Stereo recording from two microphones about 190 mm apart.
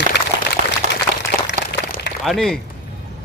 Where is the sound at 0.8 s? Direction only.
40° right (ahead or behind).